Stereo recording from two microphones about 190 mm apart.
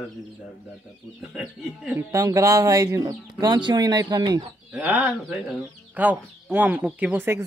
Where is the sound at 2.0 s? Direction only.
15° right (ahead or behind).